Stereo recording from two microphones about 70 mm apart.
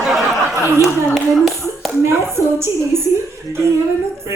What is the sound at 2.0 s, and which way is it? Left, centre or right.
A woman's voice, right.